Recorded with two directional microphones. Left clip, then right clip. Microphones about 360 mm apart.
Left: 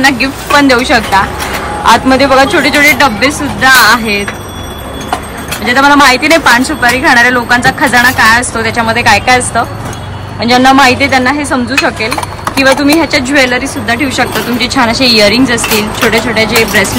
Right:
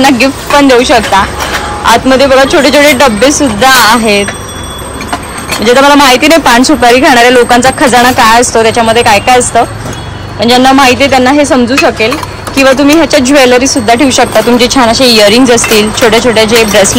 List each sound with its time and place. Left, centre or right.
0.0 s speech: centre
5.6 s speech: centre